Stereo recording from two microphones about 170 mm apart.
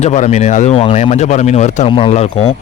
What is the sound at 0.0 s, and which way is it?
Speech, 40° left (ahead or behind).